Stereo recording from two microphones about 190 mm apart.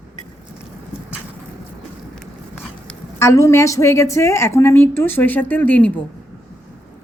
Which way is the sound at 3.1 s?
15° left (ahead or behind).